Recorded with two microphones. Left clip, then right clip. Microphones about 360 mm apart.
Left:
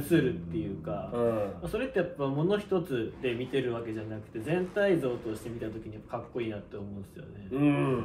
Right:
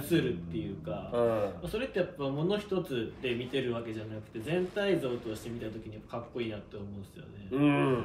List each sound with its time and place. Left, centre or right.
0.0 s speech: centre